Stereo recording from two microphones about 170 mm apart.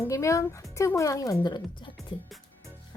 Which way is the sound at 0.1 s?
20° left (ahead or behind).